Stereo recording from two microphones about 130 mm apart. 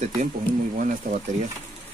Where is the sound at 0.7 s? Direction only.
90° right.